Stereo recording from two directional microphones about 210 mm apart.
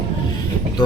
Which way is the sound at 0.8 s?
20° left (ahead or behind).